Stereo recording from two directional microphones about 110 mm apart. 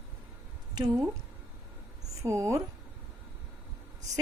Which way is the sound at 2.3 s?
30° right (ahead or behind).